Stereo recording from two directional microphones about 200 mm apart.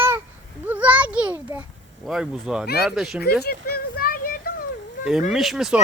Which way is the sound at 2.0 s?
5° right (ahead or behind).